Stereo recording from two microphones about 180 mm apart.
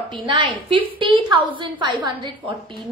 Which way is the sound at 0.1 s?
30° right (ahead or behind).